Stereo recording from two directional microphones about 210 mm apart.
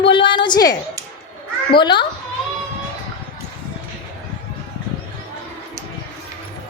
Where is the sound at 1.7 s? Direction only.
20° left (ahead or behind).